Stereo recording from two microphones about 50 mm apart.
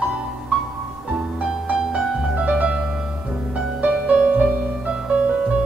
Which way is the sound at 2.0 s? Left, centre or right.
Centre.